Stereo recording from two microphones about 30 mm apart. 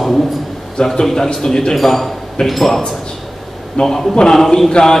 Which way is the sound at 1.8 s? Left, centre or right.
Centre.